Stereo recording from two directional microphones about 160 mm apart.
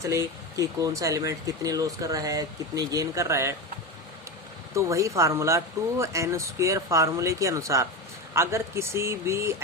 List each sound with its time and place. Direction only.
0.0 s speech: 20° right (ahead or behind)
4.7 s speech: 20° right (ahead or behind)